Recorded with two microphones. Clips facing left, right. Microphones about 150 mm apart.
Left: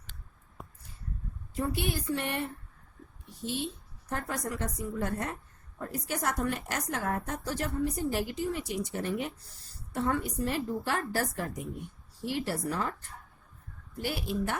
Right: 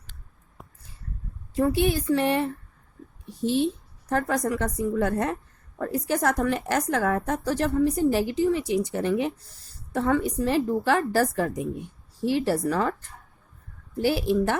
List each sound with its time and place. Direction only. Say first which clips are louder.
1.5 s a woman's voice: right 9 dB; 90° right
4.1 s a woman's voice: right 10 dB; 90° right
14.0 s a woman's voice: right 10 dB; 90° right